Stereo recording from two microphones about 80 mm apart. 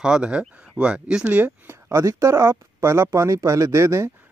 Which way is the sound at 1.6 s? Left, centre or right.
Right.